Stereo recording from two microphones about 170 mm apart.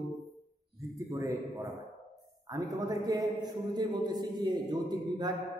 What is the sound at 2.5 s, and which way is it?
A man's voice, 20° right (ahead or behind).